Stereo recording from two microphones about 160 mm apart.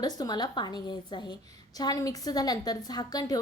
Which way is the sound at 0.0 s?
25° left (ahead or behind).